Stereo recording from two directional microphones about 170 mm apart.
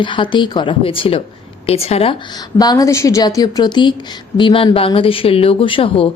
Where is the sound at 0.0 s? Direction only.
30° left (ahead or behind).